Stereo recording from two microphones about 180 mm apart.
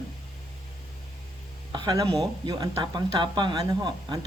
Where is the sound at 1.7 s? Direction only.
25° right (ahead or behind).